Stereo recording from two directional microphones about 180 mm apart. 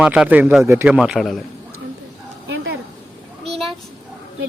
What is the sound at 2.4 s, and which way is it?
Dog, 80° right.